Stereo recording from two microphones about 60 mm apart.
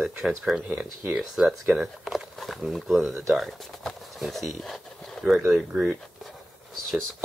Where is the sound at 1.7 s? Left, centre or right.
Centre.